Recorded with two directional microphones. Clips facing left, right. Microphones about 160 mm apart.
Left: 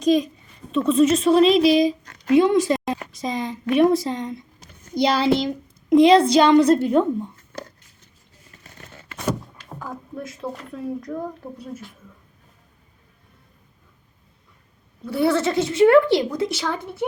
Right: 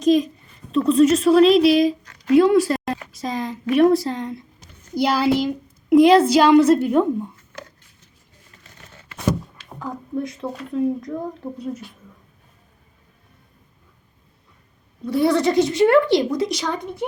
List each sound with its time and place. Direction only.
0.0 s a child's voice: centre (ahead or behind)
9.9 s a woman's voice: centre (ahead or behind)
15.0 s a woman's voice: centre (ahead or behind)
16.6 s speech: 15° right (ahead or behind)